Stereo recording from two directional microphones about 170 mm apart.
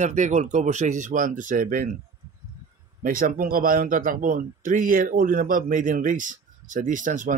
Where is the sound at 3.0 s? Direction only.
55° right (ahead or behind).